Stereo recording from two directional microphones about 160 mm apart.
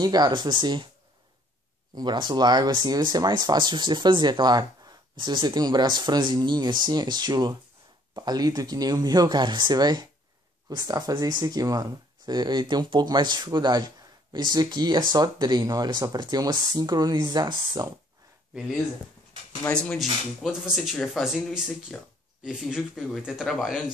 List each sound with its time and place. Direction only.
0.0 s speech: 25° right (ahead or behind)
2.0 s speech: 25° right (ahead or behind)
19.6 s speech: 5° left (ahead or behind)